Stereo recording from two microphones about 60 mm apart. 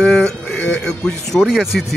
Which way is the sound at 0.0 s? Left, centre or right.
Centre.